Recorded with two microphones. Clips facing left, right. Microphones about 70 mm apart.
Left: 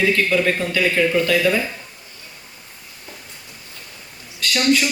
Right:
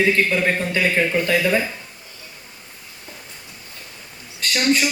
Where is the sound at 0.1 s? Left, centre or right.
Right.